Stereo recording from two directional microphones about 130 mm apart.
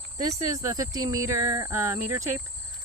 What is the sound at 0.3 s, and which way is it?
Speech, 25° right (ahead or behind).